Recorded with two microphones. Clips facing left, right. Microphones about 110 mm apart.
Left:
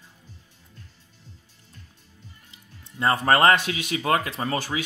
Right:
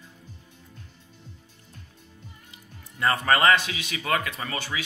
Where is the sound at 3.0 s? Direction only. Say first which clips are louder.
Left 3 dB; 30° left (ahead or behind).